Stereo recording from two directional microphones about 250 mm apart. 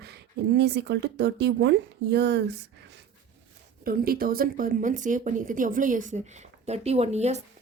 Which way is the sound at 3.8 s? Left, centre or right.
Right.